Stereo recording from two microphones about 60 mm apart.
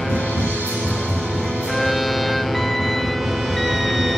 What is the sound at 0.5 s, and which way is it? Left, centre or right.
Music, right.